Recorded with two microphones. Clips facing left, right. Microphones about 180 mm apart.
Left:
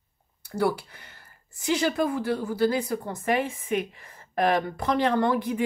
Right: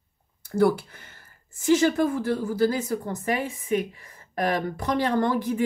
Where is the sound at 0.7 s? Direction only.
50° right (ahead or behind).